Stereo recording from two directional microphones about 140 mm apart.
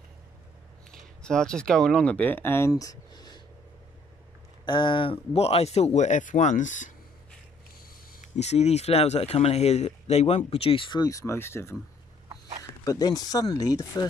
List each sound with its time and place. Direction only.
0.9 s speech: 5° left (ahead or behind); by 3.4 s 30° left (ahead or behind)
4.6 s speech: 35° left (ahead or behind); by 6.9 s 65° left (ahead or behind)
8.2 s speech: 50° left (ahead or behind); by 11.7 s 20° left (ahead or behind)
12.8 s speech: 25° left (ahead or behind)